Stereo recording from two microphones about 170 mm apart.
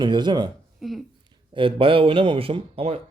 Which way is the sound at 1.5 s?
30° right (ahead or behind).